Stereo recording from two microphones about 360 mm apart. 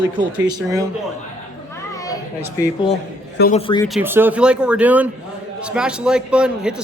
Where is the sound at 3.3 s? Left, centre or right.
Left.